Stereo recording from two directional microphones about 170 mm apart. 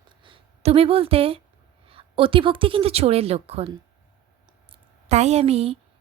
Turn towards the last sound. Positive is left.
turn(degrees=-35)  # may be behind; listen again after turning